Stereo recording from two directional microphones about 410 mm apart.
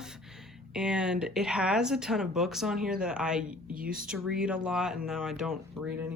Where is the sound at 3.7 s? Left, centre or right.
Right.